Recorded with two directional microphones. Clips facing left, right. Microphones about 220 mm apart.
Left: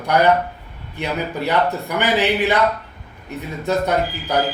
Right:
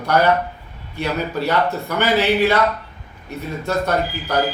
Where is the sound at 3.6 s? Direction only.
15° left (ahead or behind).